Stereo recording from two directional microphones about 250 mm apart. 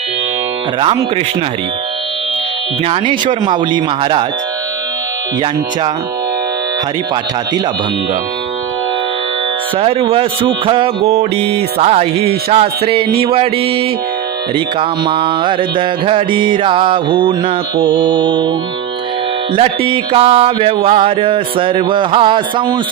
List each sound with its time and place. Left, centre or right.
0.8 s music: right
2.8 s music: right
9.7 s music: right
19.5 s music: right